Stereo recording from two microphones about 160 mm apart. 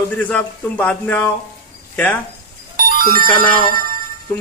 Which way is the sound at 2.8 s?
60° right (ahead or behind).